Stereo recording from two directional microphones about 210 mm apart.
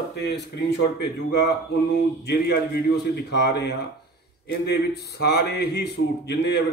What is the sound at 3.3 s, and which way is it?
A man's voice, 55° left (ahead or behind).